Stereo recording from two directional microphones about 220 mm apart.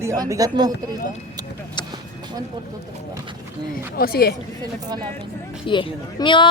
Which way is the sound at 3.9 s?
45° left (ahead or behind).